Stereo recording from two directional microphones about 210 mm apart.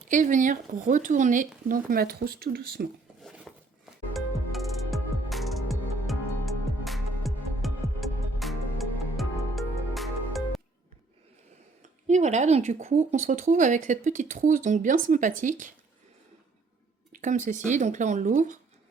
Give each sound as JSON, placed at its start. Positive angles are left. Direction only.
{"t": 0.1, "sound": "speech", "side_deg": -35}
{"t": 3.2, "sound": "a sound", "side_deg": 0}
{"t": 4.1, "sound": "music", "side_deg": 0}
{"t": 11.8, "sound": "speech", "side_deg": -35}
{"t": 17.1, "sound": "speech", "side_deg": -35}